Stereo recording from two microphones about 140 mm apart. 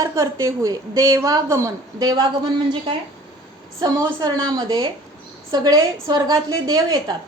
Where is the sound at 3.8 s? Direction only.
25° right (ahead or behind).